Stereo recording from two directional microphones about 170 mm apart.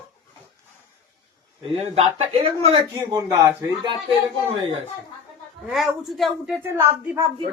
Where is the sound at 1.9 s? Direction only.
35° right (ahead or behind).